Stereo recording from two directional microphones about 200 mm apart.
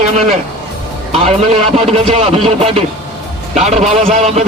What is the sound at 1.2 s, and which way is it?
Speech, 30° right (ahead or behind).